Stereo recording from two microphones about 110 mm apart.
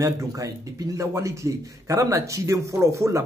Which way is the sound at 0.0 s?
30° right (ahead or behind).